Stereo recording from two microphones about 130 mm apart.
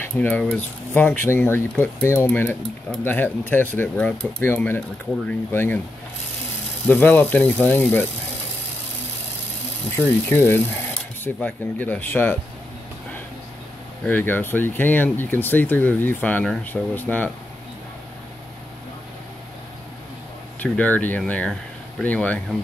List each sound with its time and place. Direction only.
0.2 s speech: 10° left (ahead or behind)
4.7 s speech: 5° left (ahead or behind)
5.5 s speech: 15° left (ahead or behind)
6.9 s speech: 15° left (ahead or behind)
9.9 s speech: 15° left (ahead or behind)
14.0 s speech: 15° left (ahead or behind)
20.6 s speech: 10° left (ahead or behind)